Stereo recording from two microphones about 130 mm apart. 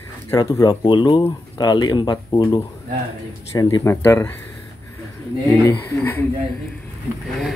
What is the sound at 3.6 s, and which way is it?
Speech, 30° left (ahead or behind).